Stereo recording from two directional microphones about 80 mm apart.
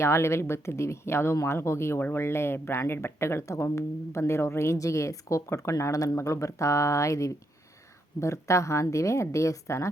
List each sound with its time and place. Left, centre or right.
0.0 s speech: left